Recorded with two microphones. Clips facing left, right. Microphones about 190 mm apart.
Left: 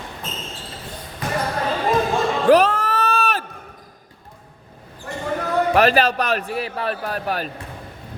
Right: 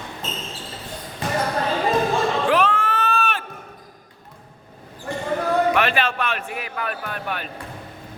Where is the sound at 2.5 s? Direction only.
40° left (ahead or behind).